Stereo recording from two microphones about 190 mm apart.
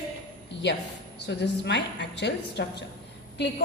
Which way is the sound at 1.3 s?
65° left (ahead or behind).